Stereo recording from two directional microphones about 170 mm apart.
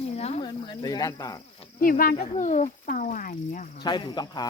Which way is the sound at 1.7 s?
55° left (ahead or behind).